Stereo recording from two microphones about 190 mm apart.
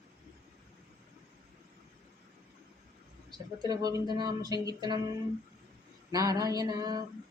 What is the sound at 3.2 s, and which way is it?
Mantra, 20° right (ahead or behind).